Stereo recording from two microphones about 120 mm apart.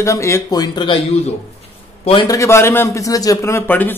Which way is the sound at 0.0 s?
25° left (ahead or behind).